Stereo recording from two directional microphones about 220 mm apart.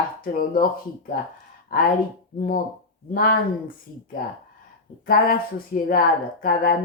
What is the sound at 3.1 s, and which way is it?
Speech, 45° left (ahead or behind).